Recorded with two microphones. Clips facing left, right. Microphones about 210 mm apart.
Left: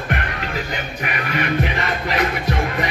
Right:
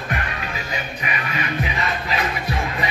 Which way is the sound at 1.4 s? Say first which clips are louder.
Left 6 dB; 60° left (ahead or behind).